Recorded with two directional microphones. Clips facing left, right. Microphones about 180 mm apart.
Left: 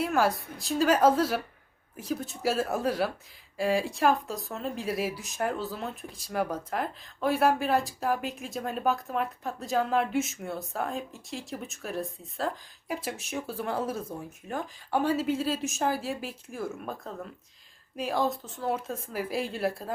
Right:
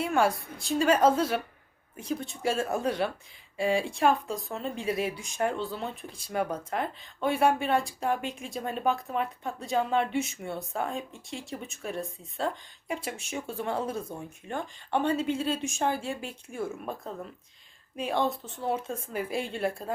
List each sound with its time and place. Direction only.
0.0 s speech: centre (ahead or behind)